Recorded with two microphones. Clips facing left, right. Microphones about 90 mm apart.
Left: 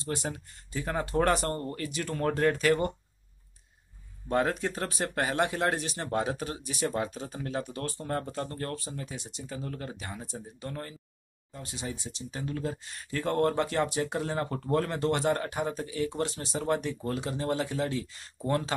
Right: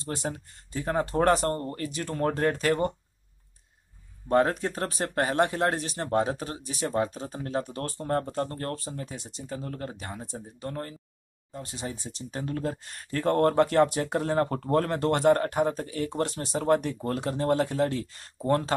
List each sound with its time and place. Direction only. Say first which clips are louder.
0.0 s speech: right 1 dB; 35° right (ahead or behind)
4.3 s speech: right 4 dB; 40° right (ahead or behind)